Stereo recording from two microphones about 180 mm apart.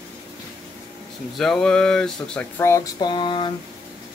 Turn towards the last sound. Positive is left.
turn(degrees=25)  # may be behind; listen again after turning